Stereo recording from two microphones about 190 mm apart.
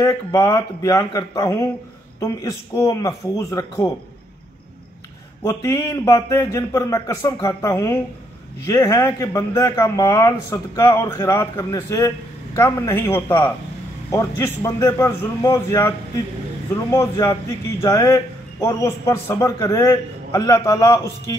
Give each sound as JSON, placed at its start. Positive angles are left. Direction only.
{"t": 0.0, "sound": "a man's voice", "side_deg": 15}
{"t": 5.4, "sound": "a man's voice", "side_deg": 15}
{"t": 16.9, "sound": "a man's voice", "side_deg": 15}